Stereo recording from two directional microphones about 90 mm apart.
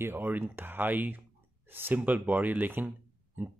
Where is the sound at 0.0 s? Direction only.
25° right (ahead or behind).